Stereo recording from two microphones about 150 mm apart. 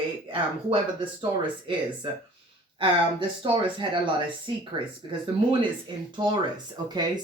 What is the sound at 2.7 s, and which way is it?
Speech, 30° right (ahead or behind).